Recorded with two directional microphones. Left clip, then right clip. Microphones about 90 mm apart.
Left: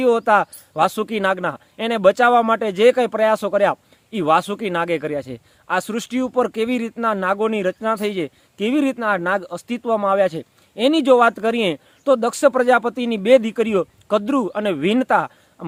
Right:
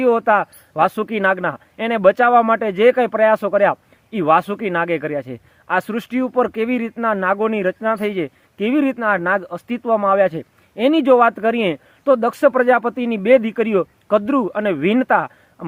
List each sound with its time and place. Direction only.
0.0 s speech: 35° left (ahead or behind)